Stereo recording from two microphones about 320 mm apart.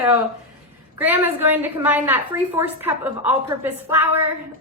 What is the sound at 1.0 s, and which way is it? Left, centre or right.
A woman's voice, centre.